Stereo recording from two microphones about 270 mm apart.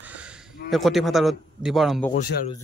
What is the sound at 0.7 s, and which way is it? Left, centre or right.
A man's voice, centre.